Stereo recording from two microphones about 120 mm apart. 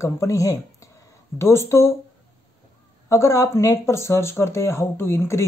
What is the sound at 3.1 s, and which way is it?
Speech, 25° left (ahead or behind).